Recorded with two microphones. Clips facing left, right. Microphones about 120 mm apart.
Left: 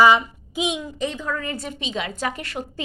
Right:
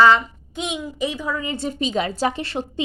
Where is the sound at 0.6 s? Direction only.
5° right (ahead or behind).